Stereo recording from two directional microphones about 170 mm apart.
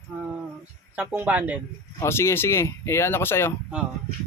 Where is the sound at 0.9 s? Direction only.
10° right (ahead or behind).